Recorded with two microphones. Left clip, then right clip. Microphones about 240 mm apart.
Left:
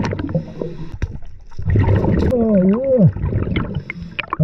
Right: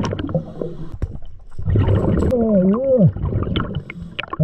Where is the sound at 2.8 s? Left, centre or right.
Right.